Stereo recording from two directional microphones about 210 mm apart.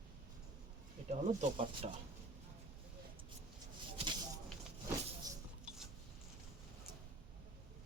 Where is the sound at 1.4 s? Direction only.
30° right (ahead or behind).